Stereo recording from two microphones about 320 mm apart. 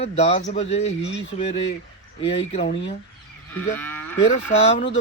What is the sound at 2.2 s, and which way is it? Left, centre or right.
Speech, centre.